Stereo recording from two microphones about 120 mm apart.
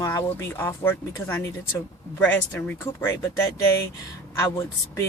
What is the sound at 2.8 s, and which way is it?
Speech, 25° left (ahead or behind).